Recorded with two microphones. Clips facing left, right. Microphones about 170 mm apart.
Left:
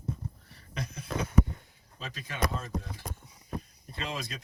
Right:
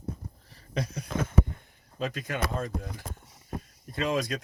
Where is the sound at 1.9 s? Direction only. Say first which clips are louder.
Right 4 dB; 50° right (ahead or behind).